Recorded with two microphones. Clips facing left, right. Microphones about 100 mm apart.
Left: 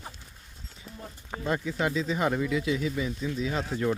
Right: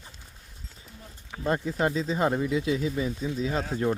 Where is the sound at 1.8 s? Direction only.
35° right (ahead or behind).